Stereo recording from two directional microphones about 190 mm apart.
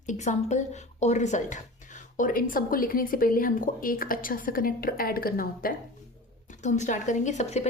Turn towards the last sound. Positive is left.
turn(degrees=35)  # may be behind; listen again after turning